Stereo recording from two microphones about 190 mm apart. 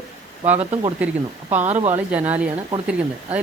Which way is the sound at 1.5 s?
35° right (ahead or behind).